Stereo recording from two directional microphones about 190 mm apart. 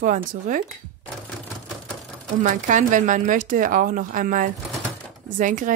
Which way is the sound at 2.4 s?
40° right (ahead or behind).